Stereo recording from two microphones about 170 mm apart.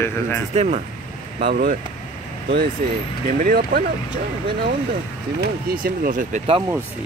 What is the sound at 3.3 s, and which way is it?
Speech, 50° right (ahead or behind).